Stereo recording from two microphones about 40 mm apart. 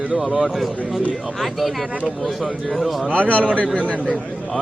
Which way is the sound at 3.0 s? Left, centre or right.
Right.